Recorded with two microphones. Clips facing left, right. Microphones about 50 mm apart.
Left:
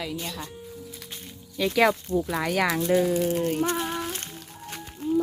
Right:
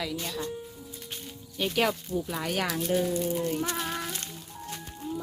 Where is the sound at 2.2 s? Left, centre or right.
Left.